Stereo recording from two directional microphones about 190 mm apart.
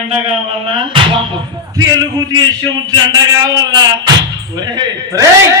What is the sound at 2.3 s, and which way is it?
A man's voice, 20° right (ahead or behind).